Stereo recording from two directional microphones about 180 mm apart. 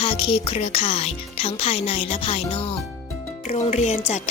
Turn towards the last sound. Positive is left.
turn(degrees=35)  # may be behind; listen again after turning